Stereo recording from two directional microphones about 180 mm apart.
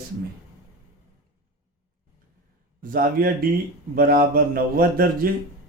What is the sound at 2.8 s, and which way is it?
A man's voice, 50° right (ahead or behind).